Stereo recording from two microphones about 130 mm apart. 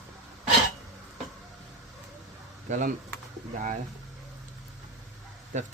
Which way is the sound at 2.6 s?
80° right.